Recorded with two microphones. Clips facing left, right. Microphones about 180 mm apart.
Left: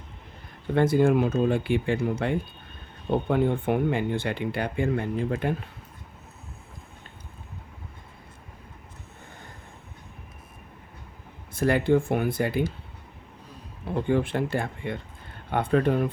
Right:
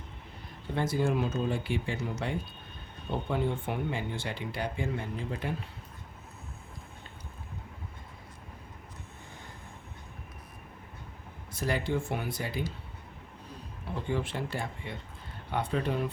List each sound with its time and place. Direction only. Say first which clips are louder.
0.8 s speech: left 9 dB; 60° left (ahead or behind)
11.5 s speech: left 9 dB; 55° left (ahead or behind)
13.9 s speech: left 8 dB; 55° left (ahead or behind)